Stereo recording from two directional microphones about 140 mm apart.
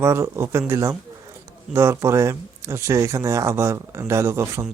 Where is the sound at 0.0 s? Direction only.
20° right (ahead or behind).